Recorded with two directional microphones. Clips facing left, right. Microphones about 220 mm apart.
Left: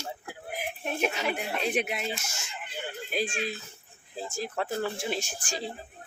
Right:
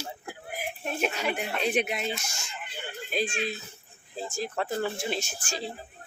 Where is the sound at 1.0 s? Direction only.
Centre (ahead or behind).